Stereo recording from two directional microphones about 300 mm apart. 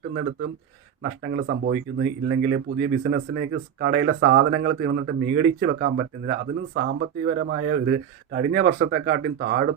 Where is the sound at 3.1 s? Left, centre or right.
Right.